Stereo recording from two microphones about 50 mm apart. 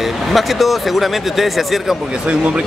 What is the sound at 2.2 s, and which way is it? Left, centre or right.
Speech, right.